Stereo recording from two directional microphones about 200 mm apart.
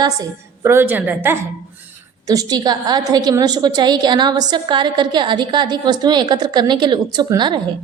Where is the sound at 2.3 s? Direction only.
20° right (ahead or behind).